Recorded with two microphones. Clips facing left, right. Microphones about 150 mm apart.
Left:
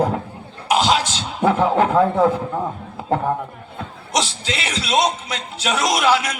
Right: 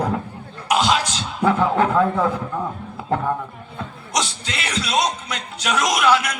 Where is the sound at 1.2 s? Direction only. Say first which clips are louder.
Left 2 dB; 20° left (ahead or behind).